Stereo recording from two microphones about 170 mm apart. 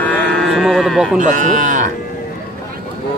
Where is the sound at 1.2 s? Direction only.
50° right (ahead or behind).